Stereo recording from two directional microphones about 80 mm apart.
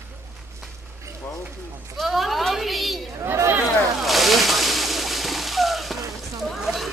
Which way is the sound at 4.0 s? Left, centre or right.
Centre.